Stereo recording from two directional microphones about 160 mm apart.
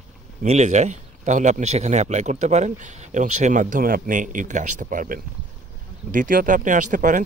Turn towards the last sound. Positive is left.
turn(degrees=-55)  # may be behind; listen again after turning